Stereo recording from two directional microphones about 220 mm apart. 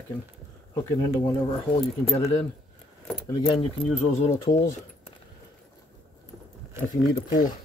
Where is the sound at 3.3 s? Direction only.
20° left (ahead or behind).